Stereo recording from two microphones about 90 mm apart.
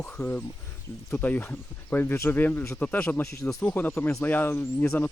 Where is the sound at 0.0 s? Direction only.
20° left (ahead or behind).